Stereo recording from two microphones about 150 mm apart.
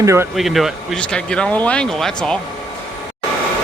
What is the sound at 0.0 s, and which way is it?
Speech, 20° right (ahead or behind).